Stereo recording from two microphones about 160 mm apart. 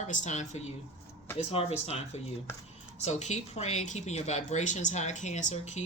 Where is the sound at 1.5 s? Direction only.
40° left (ahead or behind).